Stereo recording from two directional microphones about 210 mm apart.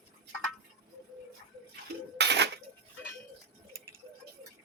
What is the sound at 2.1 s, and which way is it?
Dishes, 55° right (ahead or behind).